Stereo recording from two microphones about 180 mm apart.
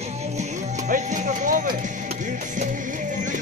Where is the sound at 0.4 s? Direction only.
45° right (ahead or behind).